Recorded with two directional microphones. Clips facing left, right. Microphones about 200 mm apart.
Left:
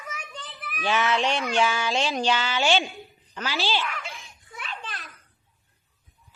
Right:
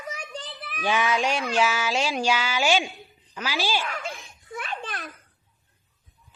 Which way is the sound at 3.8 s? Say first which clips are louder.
Right 1 dB; 40° right (ahead or behind).